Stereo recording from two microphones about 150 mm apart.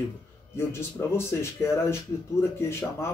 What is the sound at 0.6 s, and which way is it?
Speech, 15° left (ahead or behind).